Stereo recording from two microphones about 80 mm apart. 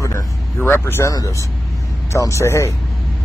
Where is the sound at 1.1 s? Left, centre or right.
Left.